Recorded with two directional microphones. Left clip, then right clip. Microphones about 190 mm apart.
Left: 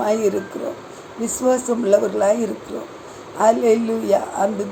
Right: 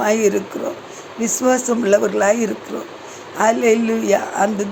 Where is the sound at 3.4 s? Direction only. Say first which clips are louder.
Even; 45° right (ahead or behind).